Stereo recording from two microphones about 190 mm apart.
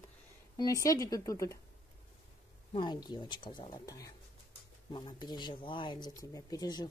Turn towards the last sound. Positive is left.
turn(degrees=20)  # may be behind; listen again after turning